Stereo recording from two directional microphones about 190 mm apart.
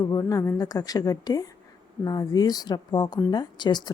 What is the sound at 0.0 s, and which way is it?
A woman's voice, 20° left (ahead or behind).